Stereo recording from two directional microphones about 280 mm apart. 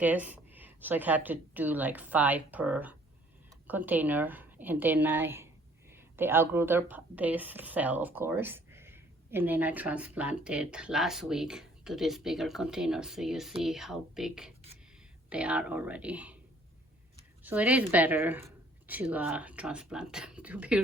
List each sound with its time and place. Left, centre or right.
0.0 s a woman's voice: centre
17.4 s a woman's voice: centre